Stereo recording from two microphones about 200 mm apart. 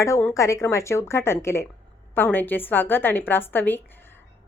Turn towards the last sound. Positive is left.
turn(degrees=10)  # may be behind; listen again after turning